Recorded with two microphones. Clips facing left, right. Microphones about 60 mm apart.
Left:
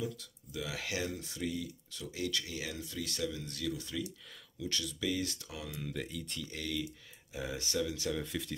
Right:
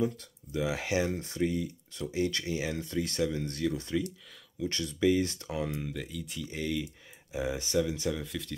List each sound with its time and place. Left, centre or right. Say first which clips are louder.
0.0 s speech: right 8 dB; right
0.6 s speech: right 8 dB; right
1.1 s speech: right 7 dB; right
2.8 s speech: right 7 dB; right
5.9 s speech: right 2 dB; centre
6.4 s speech: right 6 dB; centre
8.1 s speech: right 2 dB; centre